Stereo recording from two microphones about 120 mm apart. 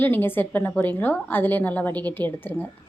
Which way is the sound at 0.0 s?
15° left (ahead or behind).